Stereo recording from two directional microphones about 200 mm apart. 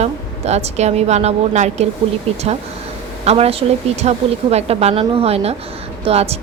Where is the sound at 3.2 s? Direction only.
30° right (ahead or behind).